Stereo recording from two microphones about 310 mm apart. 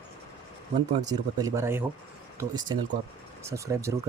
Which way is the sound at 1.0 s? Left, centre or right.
Centre.